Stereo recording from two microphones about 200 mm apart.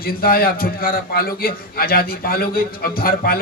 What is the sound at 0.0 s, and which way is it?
A man's voice, 45° left (ahead or behind).